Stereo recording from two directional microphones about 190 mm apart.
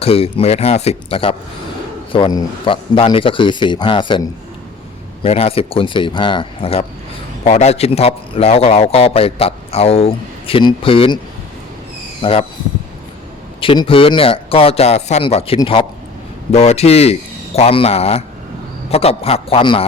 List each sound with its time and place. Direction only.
0.0 s a man's voice: 30° left (ahead or behind)
12.2 s speech: 30° left (ahead or behind)
13.6 s a man's voice: 30° left (ahead or behind)